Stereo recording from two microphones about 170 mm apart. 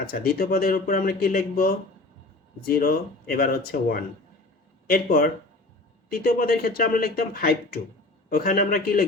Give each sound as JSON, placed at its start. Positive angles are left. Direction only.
{"t": 0.0, "sound": "speech", "side_deg": 60}